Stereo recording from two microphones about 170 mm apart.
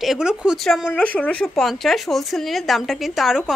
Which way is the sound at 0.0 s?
5° right (ahead or behind).